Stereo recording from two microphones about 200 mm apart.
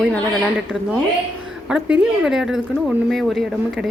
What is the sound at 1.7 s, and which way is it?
A woman's voice, 5° right (ahead or behind).